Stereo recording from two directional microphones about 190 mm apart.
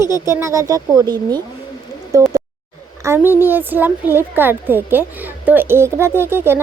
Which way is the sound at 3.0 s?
15° right (ahead or behind).